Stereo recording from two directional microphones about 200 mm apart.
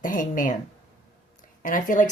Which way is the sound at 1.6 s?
40° left (ahead or behind).